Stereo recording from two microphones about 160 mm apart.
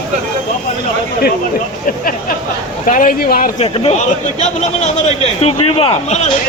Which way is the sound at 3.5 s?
35° left (ahead or behind).